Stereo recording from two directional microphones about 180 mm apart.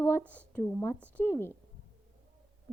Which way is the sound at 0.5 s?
10° left (ahead or behind).